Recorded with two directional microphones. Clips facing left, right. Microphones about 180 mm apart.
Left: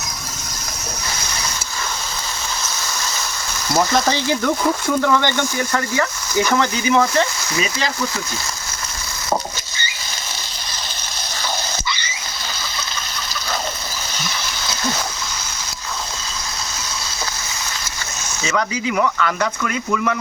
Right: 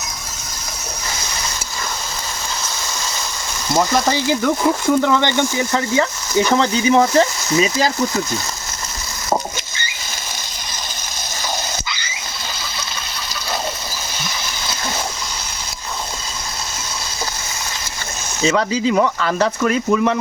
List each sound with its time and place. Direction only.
3.8 s speech: 10° right (ahead or behind); by 8.2 s 40° right (ahead or behind)
18.4 s speech: 30° right (ahead or behind)